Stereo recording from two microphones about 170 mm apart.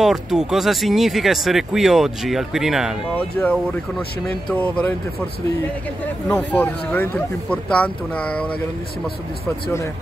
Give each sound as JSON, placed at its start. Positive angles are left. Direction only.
{"t": 0.0, "sound": "speech", "side_deg": 0}
{"t": 3.4, "sound": "speech", "side_deg": 10}
{"t": 6.2, "sound": "speech", "side_deg": 10}